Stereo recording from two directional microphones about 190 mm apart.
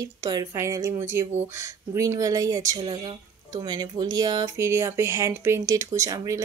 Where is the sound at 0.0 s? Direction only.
20° right (ahead or behind).